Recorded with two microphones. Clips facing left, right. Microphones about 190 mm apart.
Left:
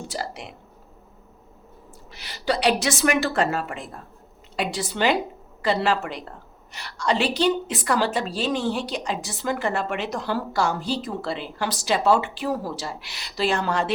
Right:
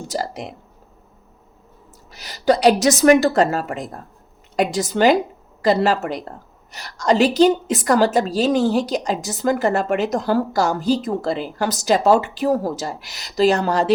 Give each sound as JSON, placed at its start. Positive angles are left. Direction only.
{"t": 0.1, "sound": "a woman's voice", "side_deg": -40}
{"t": 2.1, "sound": "a woman's voice", "side_deg": -40}